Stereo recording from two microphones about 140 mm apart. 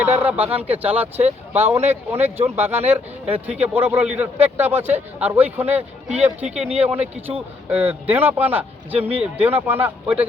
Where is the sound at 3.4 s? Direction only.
50° right (ahead or behind).